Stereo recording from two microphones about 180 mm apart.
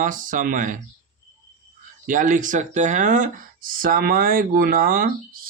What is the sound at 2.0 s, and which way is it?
Speech, 45° right (ahead or behind).